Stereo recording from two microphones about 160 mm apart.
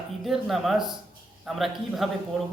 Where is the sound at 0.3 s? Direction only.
Centre (ahead or behind).